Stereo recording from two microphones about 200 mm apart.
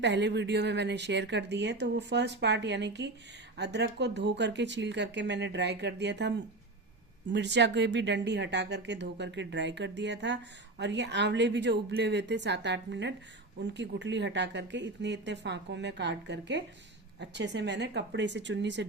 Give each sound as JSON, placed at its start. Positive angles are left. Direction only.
{"t": 0.0, "sound": "a woman's voice", "side_deg": -60}